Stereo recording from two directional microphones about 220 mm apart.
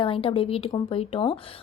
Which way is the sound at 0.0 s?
25° left (ahead or behind).